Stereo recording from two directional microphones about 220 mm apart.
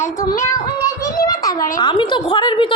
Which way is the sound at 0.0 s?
15° left (ahead or behind).